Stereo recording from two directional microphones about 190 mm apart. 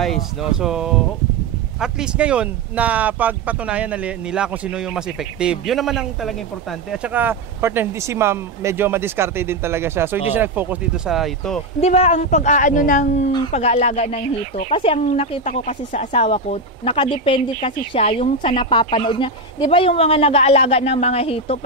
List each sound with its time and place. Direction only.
0.0 s speech: centre (ahead or behind)
11.8 s speech: 35° left (ahead or behind)